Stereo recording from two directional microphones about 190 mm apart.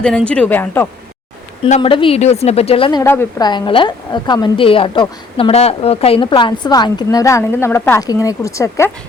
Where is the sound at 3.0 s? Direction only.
10° left (ahead or behind).